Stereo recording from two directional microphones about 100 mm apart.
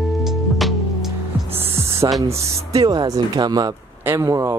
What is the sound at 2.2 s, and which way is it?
Speech, 40° right (ahead or behind).